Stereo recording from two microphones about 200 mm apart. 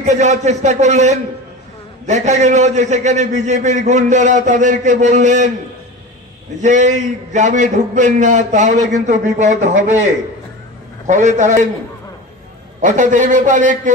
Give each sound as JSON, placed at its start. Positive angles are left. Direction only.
{"t": 0.0, "sound": "a man's voice", "side_deg": -35}
{"t": 6.6, "sound": "a man's voice", "side_deg": -35}
{"t": 11.1, "sound": "a man's voice", "side_deg": -40}
{"t": 12.8, "sound": "a man's voice", "side_deg": -40}